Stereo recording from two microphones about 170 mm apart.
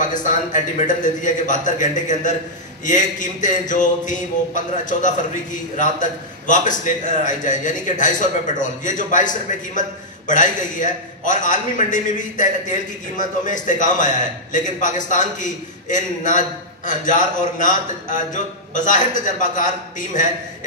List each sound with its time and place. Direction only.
0.0 s mantra: 50° left (ahead or behind)